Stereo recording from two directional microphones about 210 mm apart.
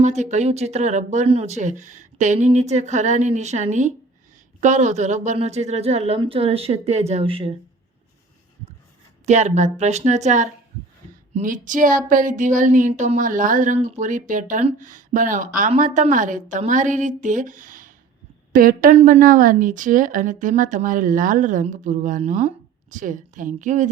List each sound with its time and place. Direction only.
0.0 s speech: 35° right (ahead or behind)
9.2 s speech: 35° right (ahead or behind)